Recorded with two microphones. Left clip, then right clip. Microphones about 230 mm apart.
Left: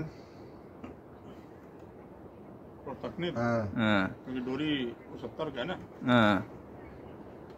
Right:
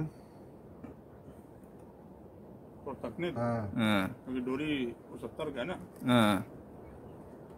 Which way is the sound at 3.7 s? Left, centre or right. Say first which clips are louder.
Left 2 dB; centre.